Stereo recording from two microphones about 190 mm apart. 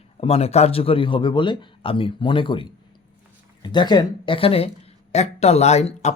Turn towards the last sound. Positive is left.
turn(degrees=35)  # may be behind; listen again after turning